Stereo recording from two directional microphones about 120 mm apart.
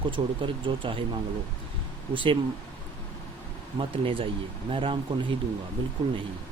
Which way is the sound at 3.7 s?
45° right (ahead or behind).